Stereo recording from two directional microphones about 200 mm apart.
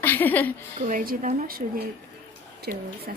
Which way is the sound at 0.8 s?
40° right (ahead or behind).